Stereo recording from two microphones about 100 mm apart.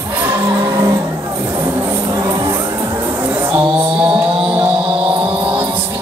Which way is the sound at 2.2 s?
35° right (ahead or behind).